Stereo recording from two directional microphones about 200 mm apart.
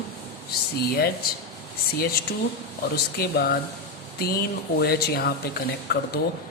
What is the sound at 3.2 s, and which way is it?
Speech, 50° left (ahead or behind).